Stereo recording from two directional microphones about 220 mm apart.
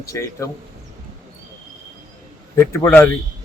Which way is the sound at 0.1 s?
15° left (ahead or behind).